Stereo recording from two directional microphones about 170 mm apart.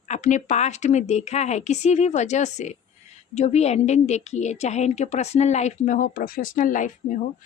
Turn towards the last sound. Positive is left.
turn(degrees=45)  # may be behind; listen again after turning